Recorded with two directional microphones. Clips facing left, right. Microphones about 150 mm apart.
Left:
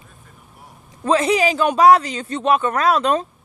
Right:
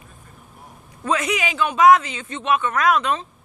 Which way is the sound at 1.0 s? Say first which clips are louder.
Left 6 dB; 30° left (ahead or behind).